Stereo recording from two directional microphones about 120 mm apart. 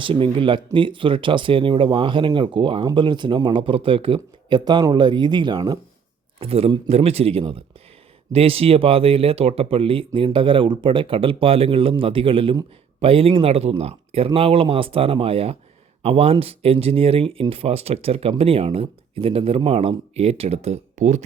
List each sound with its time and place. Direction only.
0.0 s speech: 45° right (ahead or behind)
6.4 s speech: 50° right (ahead or behind); by 21.2 s 85° right